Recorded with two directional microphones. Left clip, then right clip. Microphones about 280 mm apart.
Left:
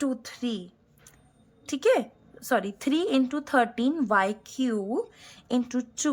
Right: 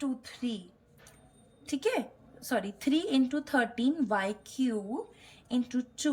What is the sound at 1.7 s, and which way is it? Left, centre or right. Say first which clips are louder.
A woman's voice: left 8 dB; centre.